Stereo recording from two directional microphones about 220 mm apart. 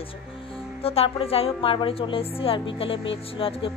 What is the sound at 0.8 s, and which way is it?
Speech, 25° left (ahead or behind).